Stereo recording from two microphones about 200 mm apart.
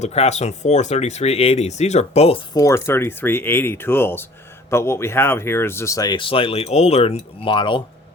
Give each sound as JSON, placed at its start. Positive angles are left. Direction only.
{"t": 0.0, "sound": "speech", "side_deg": 35}